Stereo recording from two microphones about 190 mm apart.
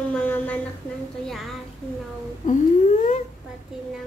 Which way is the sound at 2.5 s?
40° left (ahead or behind).